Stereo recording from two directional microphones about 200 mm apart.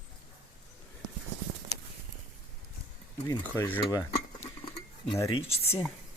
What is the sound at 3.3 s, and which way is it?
Cutlery, 10° left (ahead or behind).